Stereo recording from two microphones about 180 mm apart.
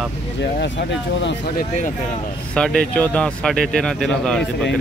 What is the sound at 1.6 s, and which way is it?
Speech, 45° left (ahead or behind).